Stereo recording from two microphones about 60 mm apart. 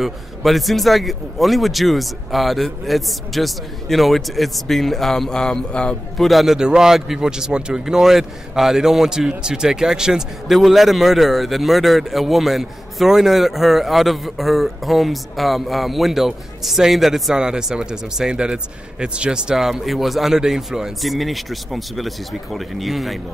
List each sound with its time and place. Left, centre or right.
0.0 s a man's voice: centre
6.1 s a man's voice: centre